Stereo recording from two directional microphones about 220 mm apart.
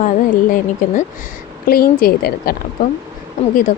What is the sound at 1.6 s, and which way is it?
Speech, 40° left (ahead or behind).